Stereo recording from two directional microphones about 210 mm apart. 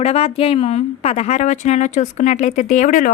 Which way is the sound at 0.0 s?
30° left (ahead or behind).